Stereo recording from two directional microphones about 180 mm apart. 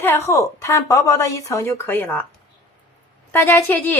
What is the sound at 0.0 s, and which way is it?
A woman's voice, 10° left (ahead or behind).